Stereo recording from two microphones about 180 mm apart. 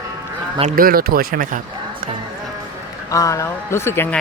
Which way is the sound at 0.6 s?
45° right (ahead or behind).